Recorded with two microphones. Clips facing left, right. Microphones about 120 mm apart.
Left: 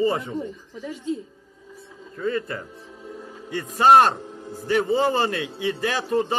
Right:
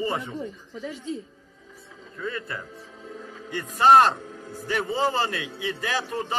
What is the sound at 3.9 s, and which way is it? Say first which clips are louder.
Speech: left 1 dB; 25° left (ahead or behind).